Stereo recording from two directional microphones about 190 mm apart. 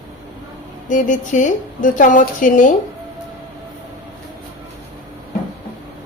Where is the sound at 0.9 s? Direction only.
40° left (ahead or behind).